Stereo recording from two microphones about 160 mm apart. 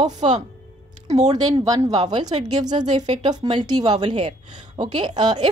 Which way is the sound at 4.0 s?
40° right (ahead or behind).